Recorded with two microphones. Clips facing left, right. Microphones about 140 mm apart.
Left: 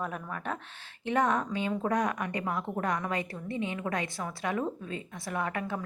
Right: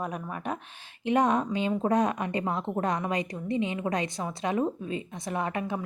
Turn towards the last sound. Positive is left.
turn(degrees=-20)  # may be behind; listen again after turning